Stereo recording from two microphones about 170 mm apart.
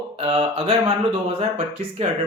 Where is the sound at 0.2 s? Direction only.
35° right (ahead or behind).